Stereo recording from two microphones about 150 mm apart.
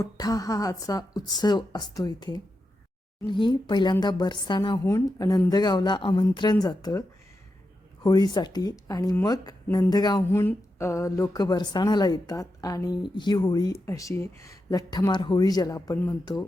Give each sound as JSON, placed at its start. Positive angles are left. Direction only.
{"t": 0.0, "sound": "a woman's voice", "side_deg": 25}
{"t": 8.0, "sound": "a woman's voice", "side_deg": 30}
{"t": 10.3, "sound": "a woman's voice", "side_deg": 15}